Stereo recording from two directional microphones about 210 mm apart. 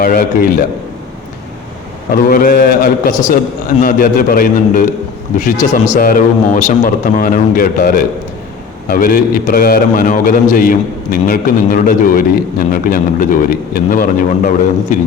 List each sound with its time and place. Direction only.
0.0 s a man's voice: 45° left (ahead or behind)
2.3 s a man's voice: 45° left (ahead or behind)